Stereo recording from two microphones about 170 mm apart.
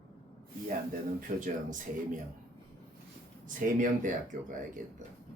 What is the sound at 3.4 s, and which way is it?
Speech, 50° right (ahead or behind).